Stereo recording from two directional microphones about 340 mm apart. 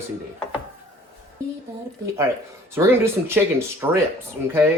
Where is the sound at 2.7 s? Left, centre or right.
Centre.